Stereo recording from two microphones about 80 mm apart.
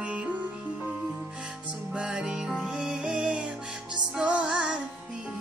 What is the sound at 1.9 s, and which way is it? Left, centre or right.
Music, centre.